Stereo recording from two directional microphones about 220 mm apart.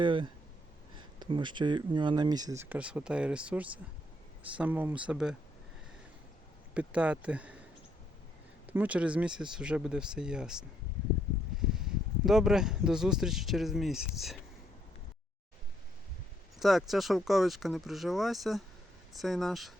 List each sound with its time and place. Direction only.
0.0 s speech: 20° right (ahead or behind); by 5.4 s 5° right (ahead or behind)
6.7 s speech: 5° right (ahead or behind)
8.6 s speech: 5° right (ahead or behind)
16.6 s speech: centre (ahead or behind)